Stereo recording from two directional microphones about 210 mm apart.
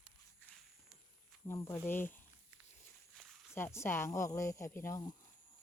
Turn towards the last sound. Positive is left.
turn(degrees=15)  # may be behind; listen again after turning